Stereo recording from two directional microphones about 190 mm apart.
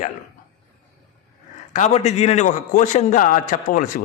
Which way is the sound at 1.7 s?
35° left (ahead or behind).